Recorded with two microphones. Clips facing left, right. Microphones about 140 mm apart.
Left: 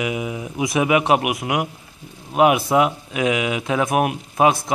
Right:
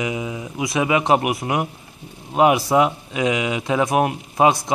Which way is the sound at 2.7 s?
5° left (ahead or behind).